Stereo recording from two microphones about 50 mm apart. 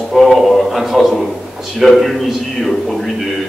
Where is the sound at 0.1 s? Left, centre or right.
Centre.